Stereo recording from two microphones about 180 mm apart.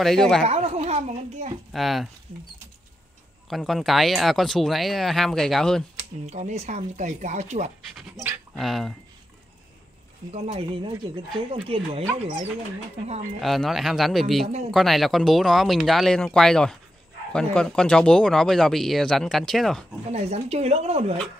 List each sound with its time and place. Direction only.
0.0 s speech: centre (ahead or behind)
0.5 s speech: 35° right (ahead or behind)
1.7 s speech: centre (ahead or behind)
3.4 s speech: centre (ahead or behind)
6.2 s speech: 35° right (ahead or behind)
8.5 s speech: centre (ahead or behind)
10.3 s speech: 35° right (ahead or behind)
13.4 s speech: centre (ahead or behind)
20.1 s speech: 35° right (ahead or behind)